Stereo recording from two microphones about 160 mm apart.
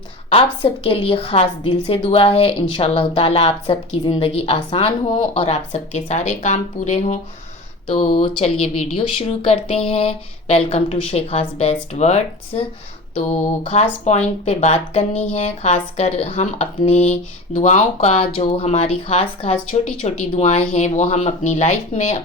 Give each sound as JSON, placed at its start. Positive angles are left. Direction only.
{"t": 0.3, "sound": "a woman's voice", "side_deg": 35}